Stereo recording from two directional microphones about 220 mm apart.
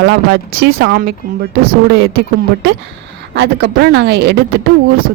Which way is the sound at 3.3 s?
50° right (ahead or behind).